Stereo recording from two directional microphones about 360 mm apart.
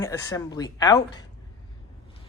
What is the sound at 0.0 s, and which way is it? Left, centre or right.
Speech, centre.